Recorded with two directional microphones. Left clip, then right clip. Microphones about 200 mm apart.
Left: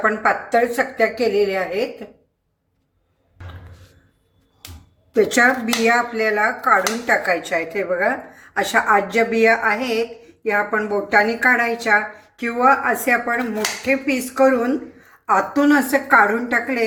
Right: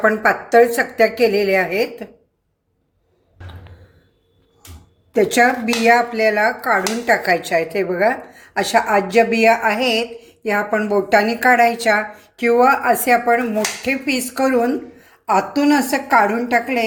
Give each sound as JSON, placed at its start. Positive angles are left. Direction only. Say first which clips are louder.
{"t": 0.0, "sound": "a woman's voice", "louder": "right 2 dB", "side_deg": -45}
{"t": 5.3, "sound": "speech", "louder": "right 2 dB", "side_deg": -30}
{"t": 8.5, "sound": "speech", "louder": "right 1 dB", "side_deg": -30}